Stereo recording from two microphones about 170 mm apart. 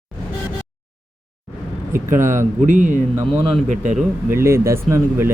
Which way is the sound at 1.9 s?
15° right (ahead or behind).